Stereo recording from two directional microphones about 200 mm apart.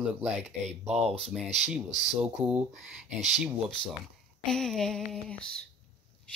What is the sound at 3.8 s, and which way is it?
Speech, 25° left (ahead or behind).